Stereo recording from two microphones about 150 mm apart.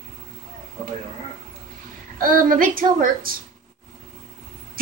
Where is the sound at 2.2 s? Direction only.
70° right (ahead or behind).